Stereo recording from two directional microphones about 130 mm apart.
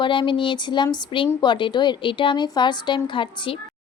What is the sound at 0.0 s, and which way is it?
Speech, 40° left (ahead or behind).